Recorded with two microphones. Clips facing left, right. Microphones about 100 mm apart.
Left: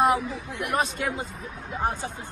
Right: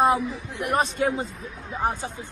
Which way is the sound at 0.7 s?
35° right (ahead or behind).